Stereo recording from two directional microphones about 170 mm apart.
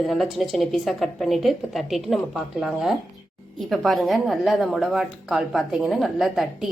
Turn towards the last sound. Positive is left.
turn(degrees=0)  # may be behind; listen again after turning